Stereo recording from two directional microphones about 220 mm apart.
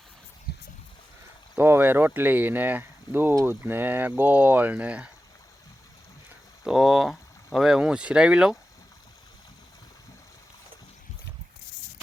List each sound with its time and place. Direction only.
0.5 s a sound: 45° left (ahead or behind)
1.5 s speech: 10° right (ahead or behind)
6.7 s speech: centre (ahead or behind)